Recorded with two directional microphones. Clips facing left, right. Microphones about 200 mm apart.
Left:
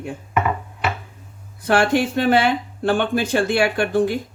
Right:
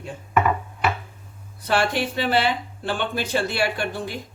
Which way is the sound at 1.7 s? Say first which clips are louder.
Left 5 dB; 50° left (ahead or behind).